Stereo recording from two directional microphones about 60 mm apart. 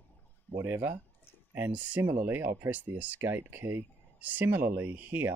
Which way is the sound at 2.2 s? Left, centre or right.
Right.